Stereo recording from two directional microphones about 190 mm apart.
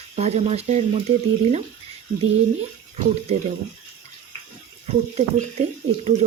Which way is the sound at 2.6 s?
35° right (ahead or behind).